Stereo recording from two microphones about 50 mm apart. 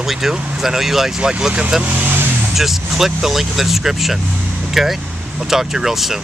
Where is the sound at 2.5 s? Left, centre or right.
Centre.